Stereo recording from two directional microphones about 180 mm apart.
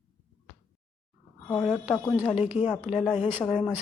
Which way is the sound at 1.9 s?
15° left (ahead or behind).